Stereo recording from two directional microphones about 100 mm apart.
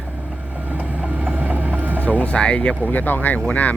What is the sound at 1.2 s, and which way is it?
Vehicle, 15° right (ahead or behind).